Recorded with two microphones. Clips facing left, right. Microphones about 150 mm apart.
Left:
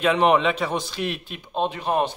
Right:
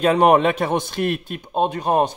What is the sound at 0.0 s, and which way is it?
A man's voice, 45° right (ahead or behind).